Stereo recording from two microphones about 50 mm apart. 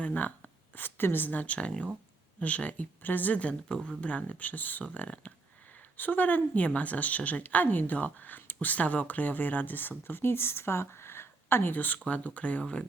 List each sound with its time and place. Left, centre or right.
0.0 s speech: left
1.5 s speech: left